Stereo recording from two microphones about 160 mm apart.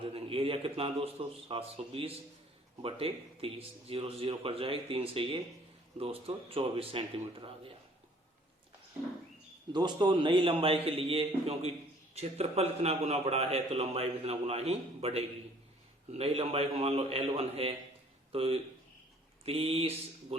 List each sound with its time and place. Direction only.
0.1 s a man's voice: 35° right (ahead or behind)
9.7 s a man's voice: 30° right (ahead or behind)